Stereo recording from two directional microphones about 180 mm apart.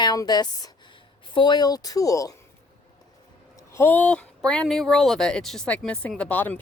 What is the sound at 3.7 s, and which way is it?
Speech, 10° left (ahead or behind).